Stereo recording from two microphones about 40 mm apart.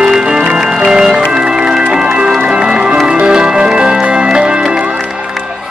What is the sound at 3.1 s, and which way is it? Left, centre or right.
Music, right.